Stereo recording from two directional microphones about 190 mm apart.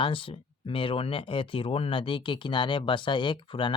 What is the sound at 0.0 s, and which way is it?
Speech, 30° left (ahead or behind).